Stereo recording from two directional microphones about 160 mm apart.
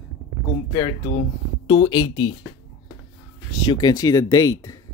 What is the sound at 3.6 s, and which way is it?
Speech, 25° left (ahead or behind).